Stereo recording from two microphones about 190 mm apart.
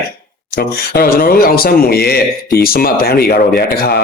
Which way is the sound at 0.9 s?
50° left (ahead or behind).